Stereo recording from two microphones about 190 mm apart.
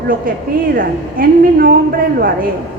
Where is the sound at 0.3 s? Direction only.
50° right (ahead or behind).